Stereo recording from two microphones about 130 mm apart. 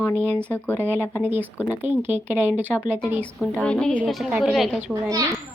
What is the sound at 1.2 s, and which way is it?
Speech, 15° right (ahead or behind).